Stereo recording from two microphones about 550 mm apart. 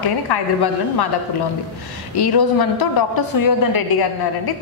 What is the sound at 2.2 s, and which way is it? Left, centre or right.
A woman's voice, left.